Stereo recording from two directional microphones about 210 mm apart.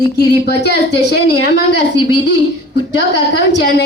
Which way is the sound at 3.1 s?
55° left (ahead or behind).